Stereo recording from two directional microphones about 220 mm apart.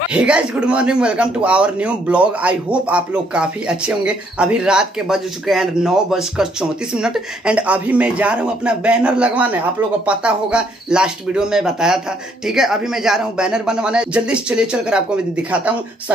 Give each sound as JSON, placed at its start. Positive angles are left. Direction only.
{"t": 0.1, "sound": "a man's voice", "side_deg": -5}